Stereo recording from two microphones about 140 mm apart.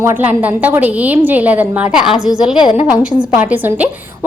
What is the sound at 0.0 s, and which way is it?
A woman's voice, 15° right (ahead or behind).